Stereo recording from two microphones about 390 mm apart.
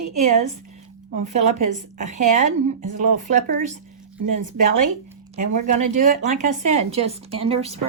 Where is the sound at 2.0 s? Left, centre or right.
Centre.